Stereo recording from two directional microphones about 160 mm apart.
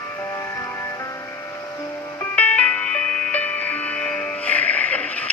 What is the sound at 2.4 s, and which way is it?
Music, 10° left (ahead or behind).